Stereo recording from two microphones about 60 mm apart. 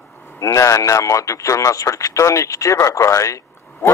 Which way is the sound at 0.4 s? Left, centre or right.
Left.